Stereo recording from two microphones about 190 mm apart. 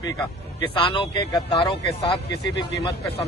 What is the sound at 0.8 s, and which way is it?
Speech, 25° left (ahead or behind).